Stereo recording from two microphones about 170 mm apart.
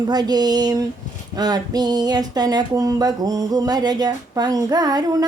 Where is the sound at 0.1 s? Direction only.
25° right (ahead or behind).